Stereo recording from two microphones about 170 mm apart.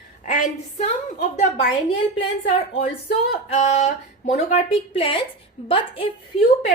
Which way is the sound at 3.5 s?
45° left (ahead or behind).